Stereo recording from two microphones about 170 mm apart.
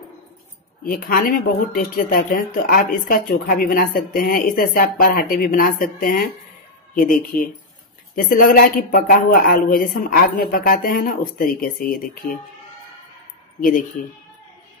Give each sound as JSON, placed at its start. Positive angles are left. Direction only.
{"t": 0.8, "sound": "speech", "side_deg": 60}
{"t": 13.6, "sound": "speech", "side_deg": 50}